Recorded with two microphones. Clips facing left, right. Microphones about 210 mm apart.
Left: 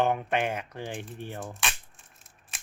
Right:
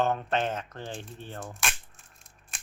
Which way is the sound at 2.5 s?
Centre (ahead or behind).